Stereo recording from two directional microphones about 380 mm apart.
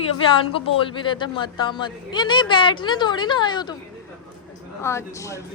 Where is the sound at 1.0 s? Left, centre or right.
Centre.